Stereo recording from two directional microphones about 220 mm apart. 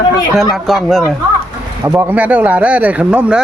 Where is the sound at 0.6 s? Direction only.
Centre (ahead or behind).